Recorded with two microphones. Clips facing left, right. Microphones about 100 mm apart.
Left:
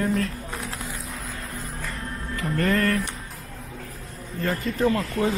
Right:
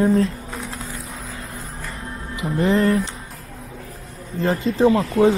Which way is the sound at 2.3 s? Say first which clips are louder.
Right 4 dB; 15° right (ahead or behind).